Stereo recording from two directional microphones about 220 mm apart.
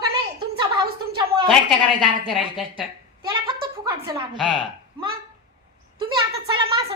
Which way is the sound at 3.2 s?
20° right (ahead or behind).